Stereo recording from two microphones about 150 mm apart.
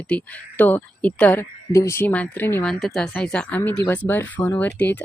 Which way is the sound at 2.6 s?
Centre (ahead or behind).